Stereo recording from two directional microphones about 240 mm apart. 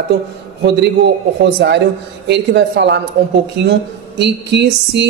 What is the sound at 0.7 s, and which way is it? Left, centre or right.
A woman's voice, right.